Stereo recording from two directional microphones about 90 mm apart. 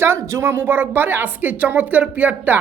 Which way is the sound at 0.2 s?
30° right (ahead or behind).